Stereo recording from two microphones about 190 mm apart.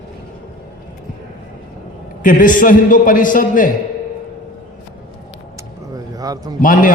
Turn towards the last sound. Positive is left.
turn(degrees=45)  # may be behind; listen again after turning